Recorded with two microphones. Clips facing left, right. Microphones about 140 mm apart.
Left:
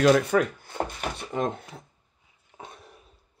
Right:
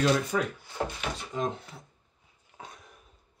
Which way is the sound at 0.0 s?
60° left (ahead or behind).